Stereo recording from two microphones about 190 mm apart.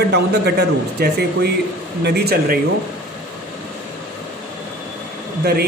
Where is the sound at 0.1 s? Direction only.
60° right (ahead or behind).